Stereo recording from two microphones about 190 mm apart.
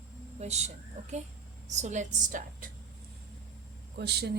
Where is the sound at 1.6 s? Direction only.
40° right (ahead or behind).